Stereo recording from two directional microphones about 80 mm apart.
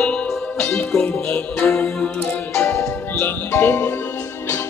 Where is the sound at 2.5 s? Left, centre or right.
Left.